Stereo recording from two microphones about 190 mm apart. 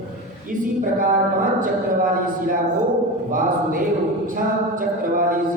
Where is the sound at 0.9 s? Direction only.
45° right (ahead or behind).